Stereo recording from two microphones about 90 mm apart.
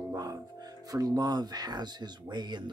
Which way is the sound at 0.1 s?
45° right (ahead or behind).